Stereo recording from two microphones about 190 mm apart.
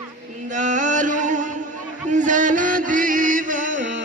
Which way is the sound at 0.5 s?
40° right (ahead or behind).